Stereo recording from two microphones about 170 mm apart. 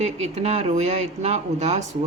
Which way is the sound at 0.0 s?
40° right (ahead or behind).